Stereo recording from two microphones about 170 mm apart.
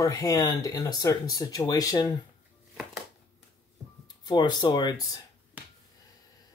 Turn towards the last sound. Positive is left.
turn(degrees=20)  # may be behind; listen again after turning